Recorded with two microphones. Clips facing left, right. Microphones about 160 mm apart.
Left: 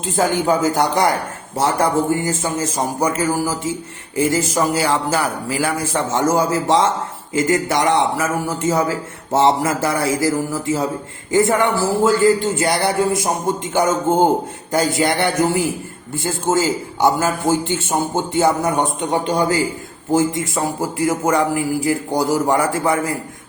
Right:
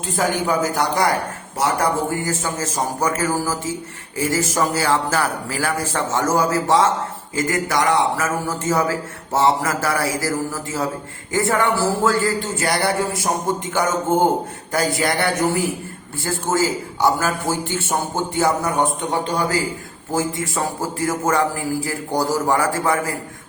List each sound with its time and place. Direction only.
0.0 s a man's voice: 25° left (ahead or behind)
20.1 s a man's voice: 15° left (ahead or behind)